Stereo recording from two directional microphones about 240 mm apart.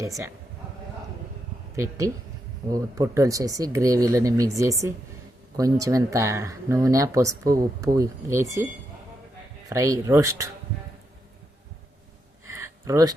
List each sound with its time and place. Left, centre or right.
0.0 s speech: centre
1.7 s speech: centre
9.6 s speech: centre
12.5 s a sound: centre